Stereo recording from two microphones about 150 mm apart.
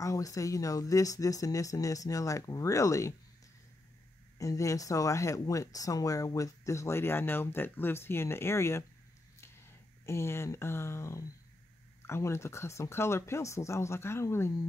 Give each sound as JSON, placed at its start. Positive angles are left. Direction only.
{"t": 0.0, "sound": "speech", "side_deg": 20}
{"t": 4.4, "sound": "speech", "side_deg": 20}
{"t": 10.0, "sound": "speech", "side_deg": 15}